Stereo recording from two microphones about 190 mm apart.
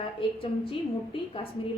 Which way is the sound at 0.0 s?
30° left (ahead or behind).